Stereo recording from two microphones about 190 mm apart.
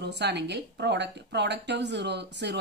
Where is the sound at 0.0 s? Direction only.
60° right (ahead or behind).